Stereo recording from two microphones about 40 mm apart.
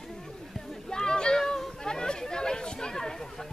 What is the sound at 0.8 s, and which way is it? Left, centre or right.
Music, centre.